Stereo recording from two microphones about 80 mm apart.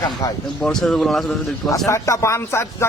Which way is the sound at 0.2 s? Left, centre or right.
Left.